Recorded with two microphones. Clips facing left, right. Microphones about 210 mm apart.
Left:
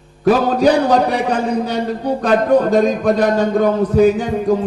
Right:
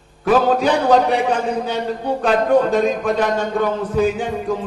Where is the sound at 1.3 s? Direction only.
40° left (ahead or behind).